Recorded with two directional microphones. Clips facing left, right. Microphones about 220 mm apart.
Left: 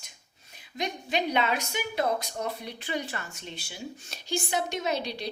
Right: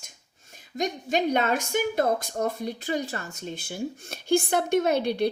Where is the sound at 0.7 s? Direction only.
45° right (ahead or behind).